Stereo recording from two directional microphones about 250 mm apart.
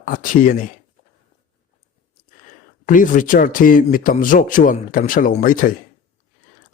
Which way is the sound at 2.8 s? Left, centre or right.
Left.